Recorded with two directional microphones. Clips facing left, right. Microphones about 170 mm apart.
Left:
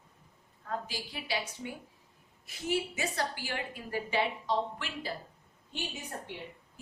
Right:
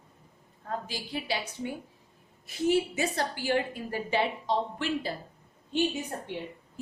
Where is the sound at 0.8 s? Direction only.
30° right (ahead or behind).